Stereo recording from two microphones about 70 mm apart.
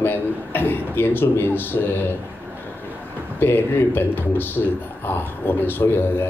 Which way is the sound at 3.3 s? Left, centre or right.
Left.